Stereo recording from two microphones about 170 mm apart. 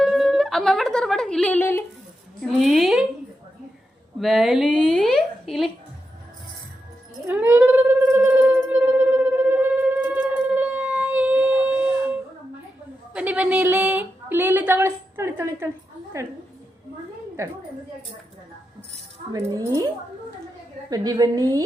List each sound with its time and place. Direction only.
0.0 s speech: centre (ahead or behind)
2.5 s a woman's voice: centre (ahead or behind)
4.2 s a woman's voice: centre (ahead or behind)
7.3 s music: 10° right (ahead or behind)
13.1 s a sound: 10° right (ahead or behind)
16.1 s a woman's voice: 20° right (ahead or behind)
19.3 s a woman's voice: 20° right (ahead or behind)
20.9 s a woman's voice: 20° right (ahead or behind)